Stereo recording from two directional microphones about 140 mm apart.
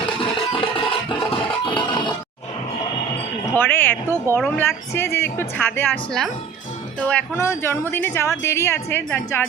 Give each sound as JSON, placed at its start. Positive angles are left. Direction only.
{"t": 0.2, "sound": "music", "side_deg": 40}
{"t": 3.5, "sound": "speech", "side_deg": 15}
{"t": 7.0, "sound": "speech", "side_deg": 10}